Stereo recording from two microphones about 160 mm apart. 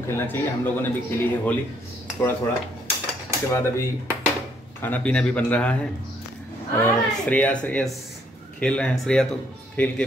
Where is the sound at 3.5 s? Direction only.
15° left (ahead or behind).